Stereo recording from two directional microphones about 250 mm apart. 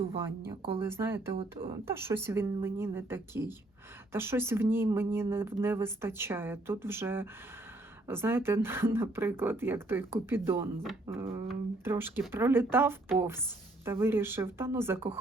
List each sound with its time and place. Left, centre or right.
0.8 s speech: centre